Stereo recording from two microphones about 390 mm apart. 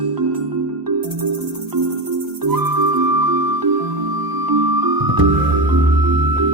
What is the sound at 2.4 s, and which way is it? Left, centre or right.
Music, right.